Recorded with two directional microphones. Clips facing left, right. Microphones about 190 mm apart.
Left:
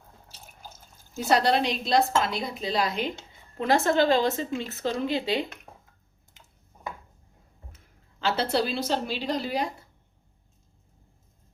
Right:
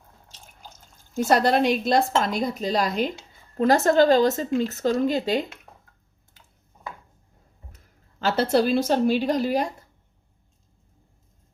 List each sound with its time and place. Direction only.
0.3 s drip: 10° left (ahead or behind)
1.3 s speech: 50° right (ahead or behind)
5.7 s a sound: 10° left (ahead or behind)
8.2 s speech: 45° right (ahead or behind)